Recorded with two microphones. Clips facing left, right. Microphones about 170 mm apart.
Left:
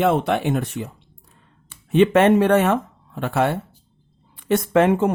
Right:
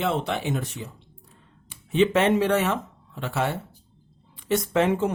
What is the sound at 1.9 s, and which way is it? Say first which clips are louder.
Speech: left 6 dB; 55° left (ahead or behind).